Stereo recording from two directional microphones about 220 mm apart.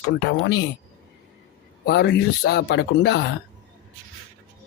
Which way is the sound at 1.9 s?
50° left (ahead or behind).